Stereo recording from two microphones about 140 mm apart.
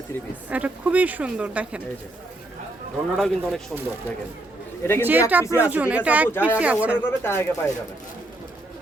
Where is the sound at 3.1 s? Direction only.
Centre (ahead or behind).